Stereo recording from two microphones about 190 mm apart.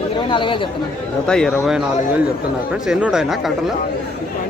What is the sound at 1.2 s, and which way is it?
Speech, 5° left (ahead or behind).